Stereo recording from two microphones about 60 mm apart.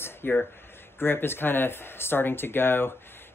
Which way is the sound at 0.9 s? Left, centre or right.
Left.